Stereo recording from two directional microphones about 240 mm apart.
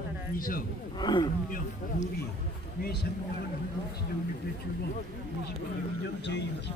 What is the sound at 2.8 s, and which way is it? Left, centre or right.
Speech, left.